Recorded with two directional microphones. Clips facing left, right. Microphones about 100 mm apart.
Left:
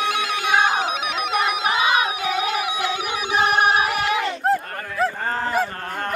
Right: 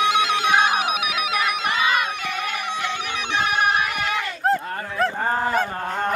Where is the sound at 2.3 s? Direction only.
10° left (ahead or behind).